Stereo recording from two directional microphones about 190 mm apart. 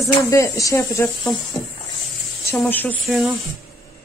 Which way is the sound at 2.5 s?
5° left (ahead or behind).